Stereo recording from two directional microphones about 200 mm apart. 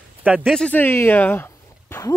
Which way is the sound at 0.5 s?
5° left (ahead or behind).